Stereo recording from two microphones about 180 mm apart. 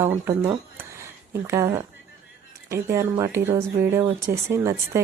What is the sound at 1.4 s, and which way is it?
Speech, 15° right (ahead or behind).